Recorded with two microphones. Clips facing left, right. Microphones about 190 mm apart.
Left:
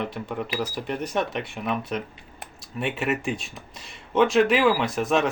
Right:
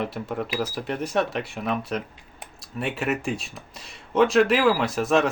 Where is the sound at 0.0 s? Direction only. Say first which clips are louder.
Right 1 dB; centre (ahead or behind).